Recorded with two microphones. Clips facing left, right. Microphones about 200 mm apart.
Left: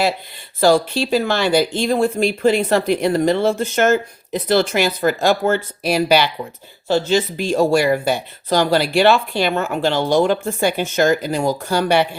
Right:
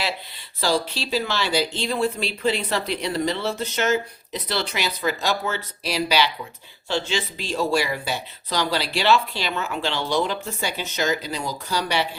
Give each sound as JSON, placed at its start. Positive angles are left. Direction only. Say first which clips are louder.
{"t": 0.6, "sound": "speech", "louder": "left 9 dB", "side_deg": 50}
{"t": 6.8, "sound": "speech", "louder": "left 9 dB", "side_deg": 40}